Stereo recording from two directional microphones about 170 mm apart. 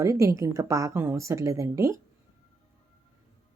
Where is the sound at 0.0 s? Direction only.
20° right (ahead or behind).